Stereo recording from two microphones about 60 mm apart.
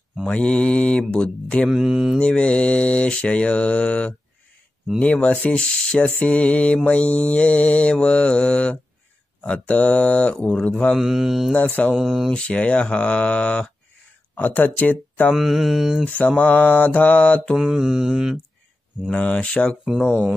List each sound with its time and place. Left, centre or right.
0.3 s mantra: centre
1.1 s speech: left
1.7 s mantra: centre
2.1 s speech: centre
11.0 s mantra: centre
11.5 s speech: left
11.9 s mantra: centre
12.3 s speech: centre
14.3 s speech: left
15.3 s mantra: centre
16.1 s speech: left
17.6 s mantra: centre
19.0 s speech: left